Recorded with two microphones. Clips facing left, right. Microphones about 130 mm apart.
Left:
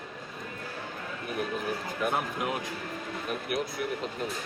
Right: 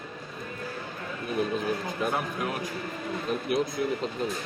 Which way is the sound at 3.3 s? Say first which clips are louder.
Right 5 dB; 25° right (ahead or behind).